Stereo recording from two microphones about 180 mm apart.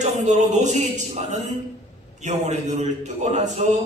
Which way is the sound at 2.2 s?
40° right (ahead or behind).